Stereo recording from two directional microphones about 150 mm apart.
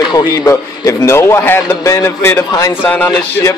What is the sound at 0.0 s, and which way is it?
A man's voice, 25° left (ahead or behind).